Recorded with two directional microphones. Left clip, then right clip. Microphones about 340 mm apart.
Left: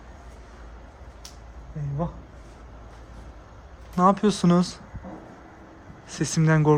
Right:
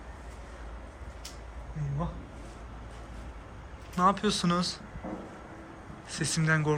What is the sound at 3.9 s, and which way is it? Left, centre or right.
Speech, left.